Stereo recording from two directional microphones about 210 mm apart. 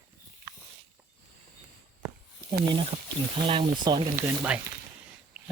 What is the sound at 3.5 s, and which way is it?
Speech, 25° right (ahead or behind).